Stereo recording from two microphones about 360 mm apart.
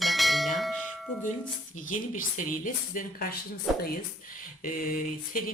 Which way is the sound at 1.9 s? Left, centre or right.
Left.